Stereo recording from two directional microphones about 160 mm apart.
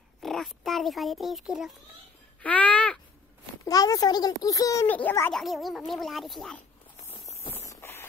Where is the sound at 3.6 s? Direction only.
25° left (ahead or behind).